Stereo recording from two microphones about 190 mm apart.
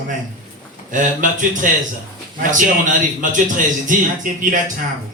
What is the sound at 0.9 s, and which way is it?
Speech, 45° right (ahead or behind).